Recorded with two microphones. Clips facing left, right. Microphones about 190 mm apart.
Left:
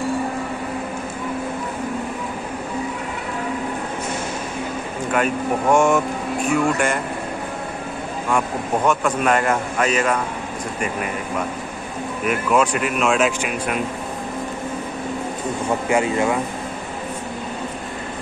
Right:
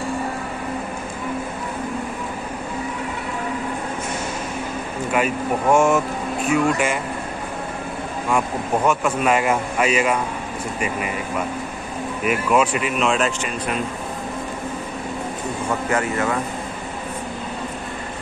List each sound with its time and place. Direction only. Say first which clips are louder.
5.1 s speech: left 1 dB; 5° right (ahead or behind)
8.3 s speech: even; 5° right (ahead or behind)
12.3 s speech: even; 5° right (ahead or behind)
15.9 s speech: left 4 dB; 15° left (ahead or behind)